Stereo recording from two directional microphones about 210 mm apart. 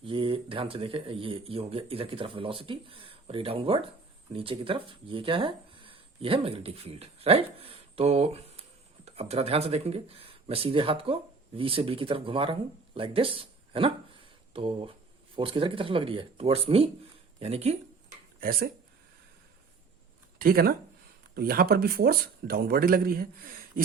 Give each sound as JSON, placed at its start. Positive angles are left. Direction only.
{"t": 0.0, "sound": "speech", "side_deg": -25}
{"t": 18.3, "sound": "speech", "side_deg": -45}
{"t": 20.4, "sound": "speech", "side_deg": -45}